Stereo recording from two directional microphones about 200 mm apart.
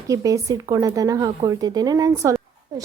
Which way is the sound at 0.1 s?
15° right (ahead or behind).